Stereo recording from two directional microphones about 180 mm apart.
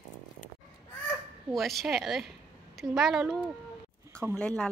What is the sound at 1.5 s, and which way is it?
Speech, centre (ahead or behind).